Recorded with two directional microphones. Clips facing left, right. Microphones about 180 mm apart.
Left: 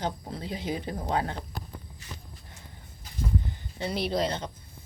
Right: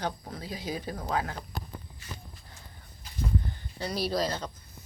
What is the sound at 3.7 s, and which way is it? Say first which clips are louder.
Speech: left 1 dB; 20° left (ahead or behind).